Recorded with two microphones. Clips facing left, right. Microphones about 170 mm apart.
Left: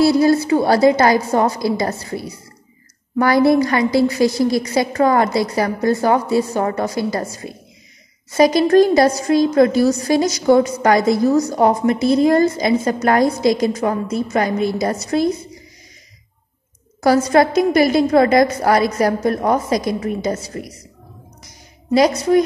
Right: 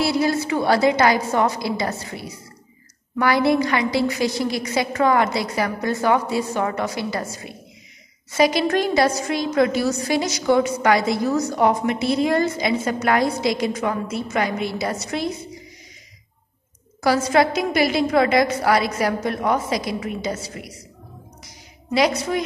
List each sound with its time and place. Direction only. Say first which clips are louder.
0.0 s a woman's voice: left 7 dB; 40° left (ahead or behind)
17.0 s a woman's voice: left 4 dB; 45° left (ahead or behind)
21.9 s a woman's voice: left 6 dB; 40° left (ahead or behind)